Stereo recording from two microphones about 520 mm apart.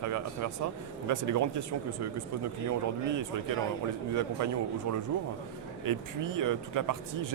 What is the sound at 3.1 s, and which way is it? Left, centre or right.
Speech, right.